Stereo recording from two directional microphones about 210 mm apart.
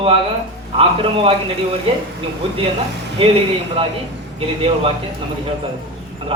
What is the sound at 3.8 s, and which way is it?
Speech, 30° right (ahead or behind).